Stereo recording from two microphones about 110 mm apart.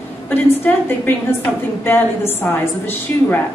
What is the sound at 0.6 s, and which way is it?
A woman's voice, 15° left (ahead or behind).